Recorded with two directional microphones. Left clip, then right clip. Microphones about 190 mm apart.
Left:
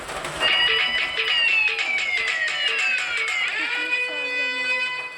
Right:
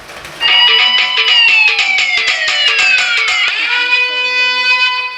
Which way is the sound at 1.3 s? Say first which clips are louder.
Right 11 dB; centre (ahead or behind).